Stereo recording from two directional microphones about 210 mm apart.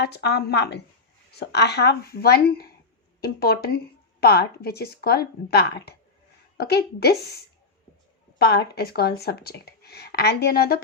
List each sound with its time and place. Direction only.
0.0 s speech: 50° left (ahead or behind)